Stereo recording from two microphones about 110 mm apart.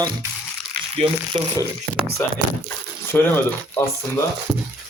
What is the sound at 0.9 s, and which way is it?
Speech, 70° right (ahead or behind).